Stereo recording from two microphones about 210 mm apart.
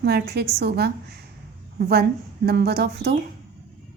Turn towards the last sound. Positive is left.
turn(degrees=-50)  # may be behind; listen again after turning